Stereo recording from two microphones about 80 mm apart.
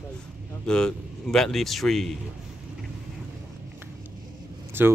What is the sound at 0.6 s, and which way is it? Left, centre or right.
A man's voice, centre.